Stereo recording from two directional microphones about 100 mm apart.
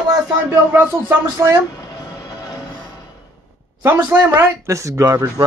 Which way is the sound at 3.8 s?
20° right (ahead or behind).